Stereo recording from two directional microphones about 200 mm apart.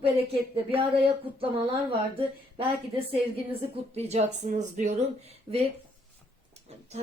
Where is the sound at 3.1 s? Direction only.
30° right (ahead or behind).